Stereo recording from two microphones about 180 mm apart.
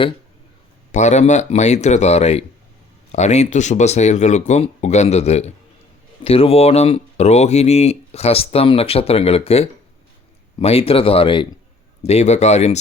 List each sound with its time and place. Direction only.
0.9 s speech: 40° left (ahead or behind)